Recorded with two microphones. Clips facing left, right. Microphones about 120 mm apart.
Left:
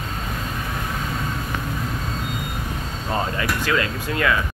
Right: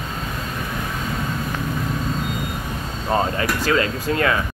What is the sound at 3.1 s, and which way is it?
Air conditioning, 30° right (ahead or behind).